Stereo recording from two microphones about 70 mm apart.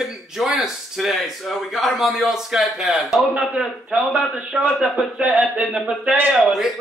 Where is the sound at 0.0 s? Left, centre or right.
Centre.